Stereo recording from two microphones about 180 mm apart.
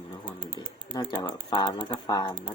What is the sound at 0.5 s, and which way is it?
Pigeon, 25° left (ahead or behind).